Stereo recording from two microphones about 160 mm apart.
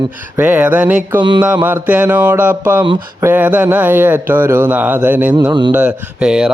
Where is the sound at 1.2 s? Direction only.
30° right (ahead or behind).